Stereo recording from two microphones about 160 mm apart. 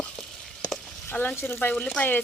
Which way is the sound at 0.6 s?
10° left (ahead or behind).